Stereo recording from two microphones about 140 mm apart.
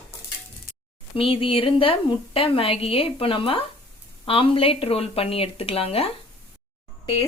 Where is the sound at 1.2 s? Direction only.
40° left (ahead or behind).